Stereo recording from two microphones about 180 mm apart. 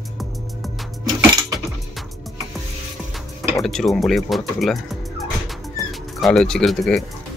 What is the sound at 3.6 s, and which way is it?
Speech, centre (ahead or behind).